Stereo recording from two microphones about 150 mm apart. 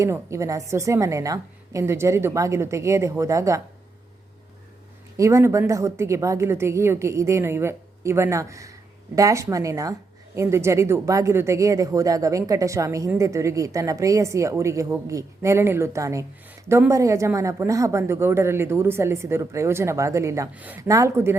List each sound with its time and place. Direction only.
0.0 s speech: 20° right (ahead or behind)
5.1 s a woman's voice: 20° right (ahead or behind)
20.8 s speech: 20° right (ahead or behind)